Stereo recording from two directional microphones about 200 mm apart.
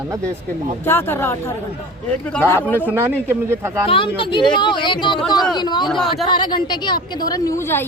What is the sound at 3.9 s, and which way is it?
Speech, 25° left (ahead or behind).